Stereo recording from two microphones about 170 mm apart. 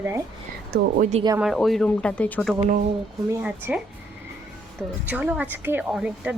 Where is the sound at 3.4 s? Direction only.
5° right (ahead or behind).